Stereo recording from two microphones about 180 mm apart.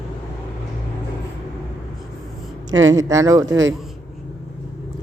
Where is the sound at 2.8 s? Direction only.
90° right.